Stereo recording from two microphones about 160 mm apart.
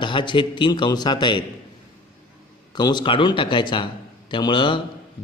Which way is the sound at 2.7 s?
25° left (ahead or behind).